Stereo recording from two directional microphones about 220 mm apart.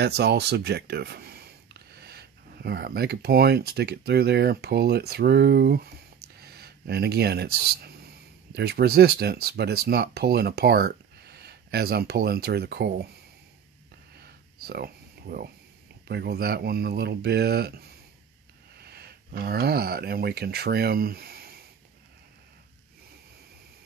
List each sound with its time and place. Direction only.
0.0 s speech: 50° right (ahead or behind)
14.7 s speech: 45° right (ahead or behind)